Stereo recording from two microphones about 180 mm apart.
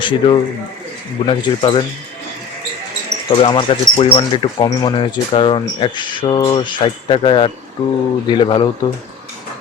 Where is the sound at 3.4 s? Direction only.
30° left (ahead or behind).